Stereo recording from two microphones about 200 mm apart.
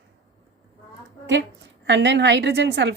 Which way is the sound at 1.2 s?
60° right (ahead or behind).